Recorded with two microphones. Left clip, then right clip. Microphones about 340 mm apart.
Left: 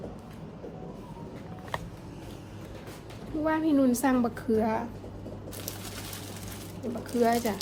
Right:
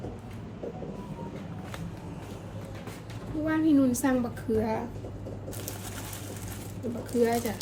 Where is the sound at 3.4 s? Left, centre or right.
Centre.